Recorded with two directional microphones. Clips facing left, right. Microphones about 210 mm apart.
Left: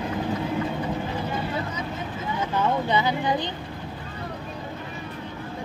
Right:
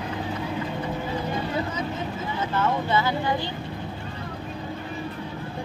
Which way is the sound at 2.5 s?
15° left (ahead or behind).